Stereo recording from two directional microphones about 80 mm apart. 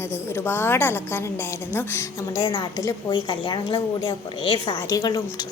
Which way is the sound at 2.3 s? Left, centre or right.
Left.